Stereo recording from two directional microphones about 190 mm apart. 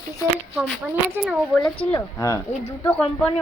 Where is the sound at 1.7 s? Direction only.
15° left (ahead or behind).